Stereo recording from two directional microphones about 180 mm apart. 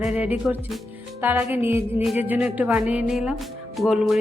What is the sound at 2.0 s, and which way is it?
Speech, 5° right (ahead or behind).